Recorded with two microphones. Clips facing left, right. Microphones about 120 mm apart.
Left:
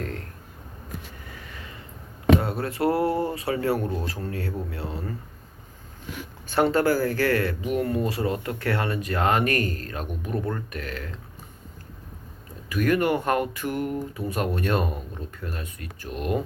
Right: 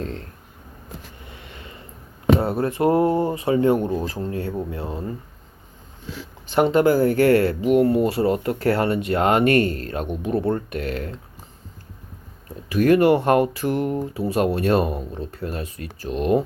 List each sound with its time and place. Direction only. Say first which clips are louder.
0.0 s speech: right 3 dB; 25° right (ahead or behind)
1.3 s a sound: right 2 dB; 25° right (ahead or behind)
2.4 s speech: right 5 dB; 25° right (ahead or behind)
6.5 s speech: right 4 dB; 20° right (ahead or behind); by 11.2 s 35° right (ahead or behind)
12.6 s speech: right 7 dB; 35° right (ahead or behind)